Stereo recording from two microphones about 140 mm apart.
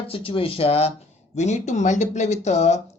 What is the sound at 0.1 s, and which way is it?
Speech, 40° left (ahead or behind).